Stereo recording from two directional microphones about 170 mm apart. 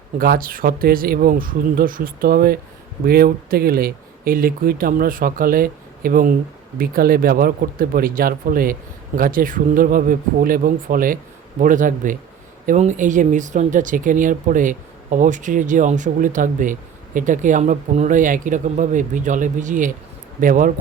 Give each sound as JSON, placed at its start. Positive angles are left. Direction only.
{"t": 0.2, "sound": "speech", "side_deg": -60}